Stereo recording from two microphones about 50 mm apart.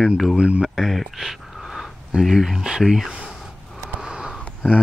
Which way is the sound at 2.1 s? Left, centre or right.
Centre.